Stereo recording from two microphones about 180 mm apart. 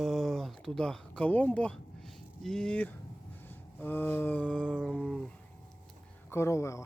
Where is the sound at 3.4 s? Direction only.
10° left (ahead or behind).